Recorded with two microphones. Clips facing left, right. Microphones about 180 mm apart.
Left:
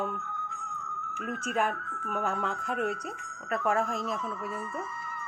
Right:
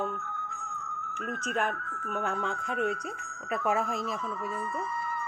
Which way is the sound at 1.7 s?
40° right (ahead or behind).